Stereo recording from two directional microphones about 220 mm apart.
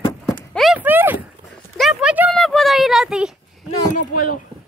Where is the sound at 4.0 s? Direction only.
40° left (ahead or behind).